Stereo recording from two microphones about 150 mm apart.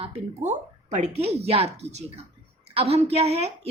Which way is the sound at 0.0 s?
40° right (ahead or behind).